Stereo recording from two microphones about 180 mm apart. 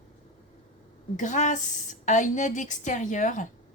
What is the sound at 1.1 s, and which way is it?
A woman's voice, 45° left (ahead or behind).